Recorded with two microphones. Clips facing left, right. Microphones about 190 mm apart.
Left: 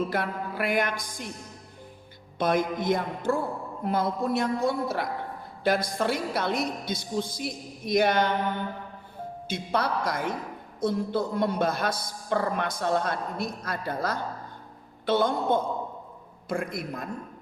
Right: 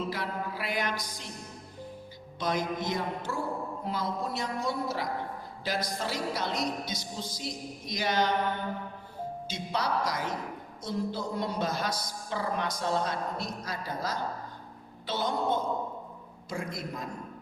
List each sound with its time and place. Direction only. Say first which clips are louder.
0.0 s a sound: left 4 dB; 55° left (ahead or behind)
2.4 s a man's voice: left 5 dB; 55° left (ahead or behind)
9.5 s a man's voice: left 4 dB; 55° left (ahead or behind)